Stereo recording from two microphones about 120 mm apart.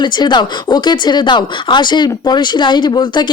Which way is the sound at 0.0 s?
35° left (ahead or behind).